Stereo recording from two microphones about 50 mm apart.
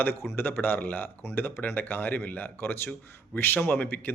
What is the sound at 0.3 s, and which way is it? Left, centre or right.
Speech, left.